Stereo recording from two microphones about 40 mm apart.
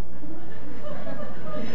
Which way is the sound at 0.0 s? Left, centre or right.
Left.